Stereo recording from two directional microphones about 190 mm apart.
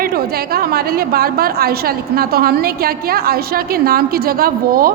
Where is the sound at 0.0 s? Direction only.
55° right (ahead or behind).